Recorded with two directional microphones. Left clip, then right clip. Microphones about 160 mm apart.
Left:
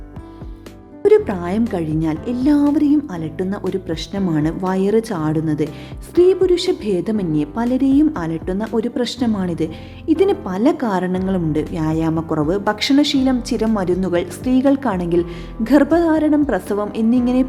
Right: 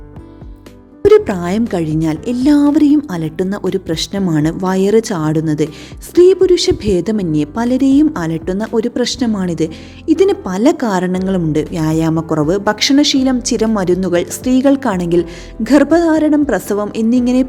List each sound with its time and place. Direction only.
1.0 s a woman's voice: 20° right (ahead or behind)